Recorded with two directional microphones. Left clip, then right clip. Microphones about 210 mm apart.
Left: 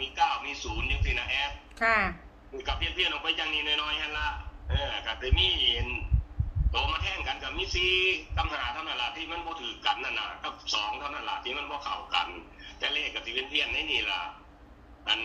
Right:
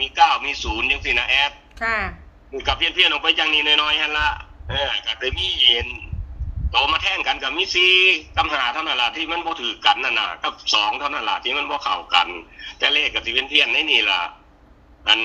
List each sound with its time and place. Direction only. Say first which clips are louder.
0.0 s a man's voice: right 11 dB; 55° right (ahead or behind)
1.8 s speech: right 3 dB; centre (ahead or behind)
2.6 s a man's voice: right 12 dB; 55° right (ahead or behind)